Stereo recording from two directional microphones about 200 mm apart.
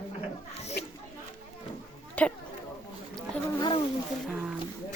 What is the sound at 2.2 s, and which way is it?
Speech, 5° left (ahead or behind).